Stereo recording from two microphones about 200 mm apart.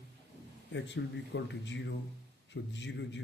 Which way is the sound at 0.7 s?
60° left (ahead or behind).